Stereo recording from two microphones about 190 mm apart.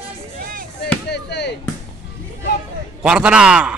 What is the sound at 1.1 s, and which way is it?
Speech, 65° left (ahead or behind).